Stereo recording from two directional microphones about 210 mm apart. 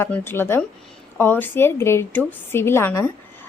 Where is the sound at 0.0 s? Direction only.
10° left (ahead or behind).